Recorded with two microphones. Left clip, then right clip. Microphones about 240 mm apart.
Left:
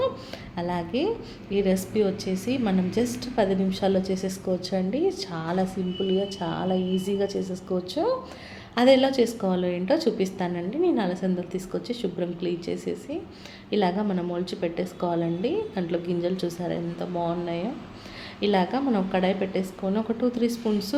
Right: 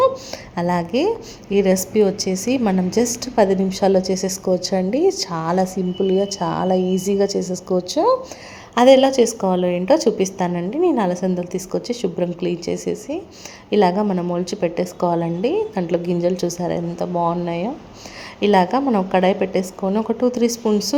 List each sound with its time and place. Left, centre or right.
0.5 s a woman's voice: right